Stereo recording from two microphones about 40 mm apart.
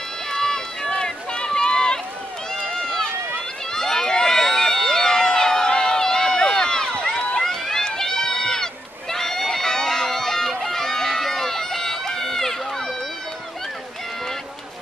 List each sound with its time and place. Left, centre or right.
0.3 s run: centre
3.7 s crowd: centre
7.4 s run: centre